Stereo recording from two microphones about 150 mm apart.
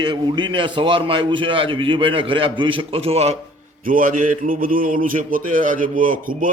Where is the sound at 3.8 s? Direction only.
65° right (ahead or behind).